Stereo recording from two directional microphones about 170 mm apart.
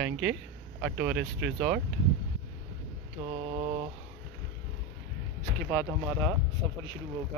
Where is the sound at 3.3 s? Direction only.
35° right (ahead or behind).